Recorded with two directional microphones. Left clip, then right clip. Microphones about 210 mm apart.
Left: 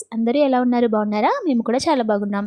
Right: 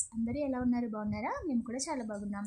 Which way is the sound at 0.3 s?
35° left (ahead or behind).